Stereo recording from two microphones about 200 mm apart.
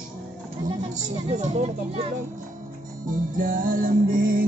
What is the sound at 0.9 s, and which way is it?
Speech, 35° right (ahead or behind).